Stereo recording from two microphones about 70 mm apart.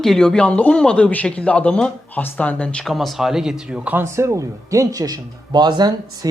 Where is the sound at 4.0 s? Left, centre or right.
Right.